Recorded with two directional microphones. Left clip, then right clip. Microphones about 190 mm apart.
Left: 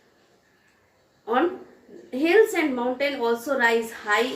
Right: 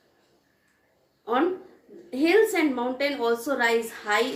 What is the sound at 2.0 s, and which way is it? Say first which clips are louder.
A woman's voice: left 2 dB; 15° right (ahead or behind).